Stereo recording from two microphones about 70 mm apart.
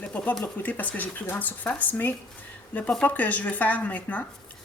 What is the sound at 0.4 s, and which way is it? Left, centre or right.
A woman's voice, left.